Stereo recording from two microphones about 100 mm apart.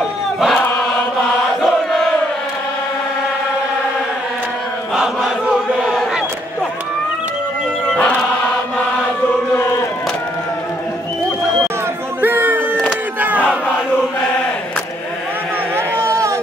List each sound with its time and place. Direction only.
0.0 s crowd: centre (ahead or behind)
1.6 s chant: 5° left (ahead or behind)
4.9 s chant: 5° right (ahead or behind)
7.9 s music: 10° left (ahead or behind)
12.2 s a sound: 20° right (ahead or behind)
13.2 s battle cry: 15° right (ahead or behind)
15.7 s a sound: 25° right (ahead or behind)